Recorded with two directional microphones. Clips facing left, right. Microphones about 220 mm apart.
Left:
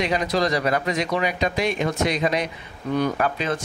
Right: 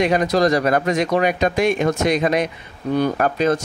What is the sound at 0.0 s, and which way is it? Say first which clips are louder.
Speech: right 6 dB; 50° right (ahead or behind).